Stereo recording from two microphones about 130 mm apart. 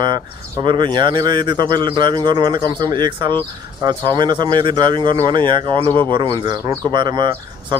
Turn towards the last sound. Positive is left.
turn(degrees=-35)  # may be behind; listen again after turning